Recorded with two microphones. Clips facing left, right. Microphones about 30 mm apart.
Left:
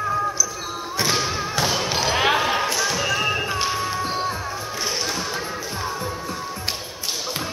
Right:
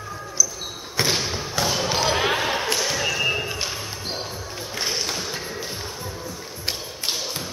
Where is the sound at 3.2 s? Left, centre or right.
Left.